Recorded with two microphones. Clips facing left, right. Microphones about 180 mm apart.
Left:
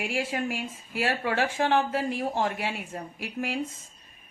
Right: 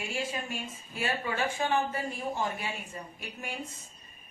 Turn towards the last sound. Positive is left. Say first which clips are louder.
# left 8 dB
turn(degrees=90)